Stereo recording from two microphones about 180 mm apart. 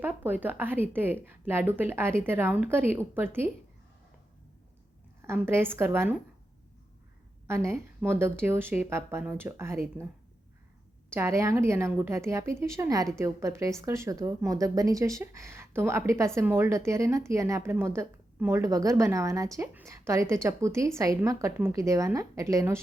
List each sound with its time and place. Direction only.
0.0 s speech: 10° right (ahead or behind)
5.2 s speech: 15° right (ahead or behind)
7.4 s speech: 15° right (ahead or behind)
11.1 s speech: 15° right (ahead or behind)